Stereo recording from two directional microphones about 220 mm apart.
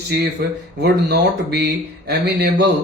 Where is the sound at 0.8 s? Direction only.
50° right (ahead or behind).